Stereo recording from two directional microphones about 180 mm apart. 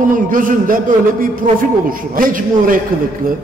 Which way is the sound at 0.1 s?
50° right (ahead or behind).